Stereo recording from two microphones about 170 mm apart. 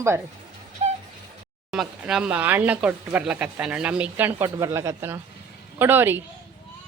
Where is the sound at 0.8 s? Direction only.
40° right (ahead or behind).